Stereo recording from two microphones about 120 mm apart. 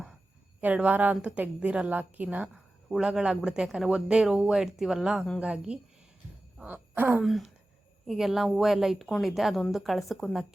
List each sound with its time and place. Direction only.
0.6 s a woman's voice: 10° right (ahead or behind)
6.6 s groan: 15° right (ahead or behind)
7.2 s speech: centre (ahead or behind)